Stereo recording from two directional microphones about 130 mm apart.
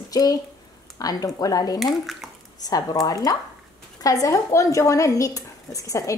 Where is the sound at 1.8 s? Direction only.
Centre (ahead or behind).